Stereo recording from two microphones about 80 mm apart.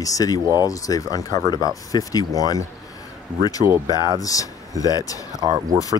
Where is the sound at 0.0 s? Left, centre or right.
Left.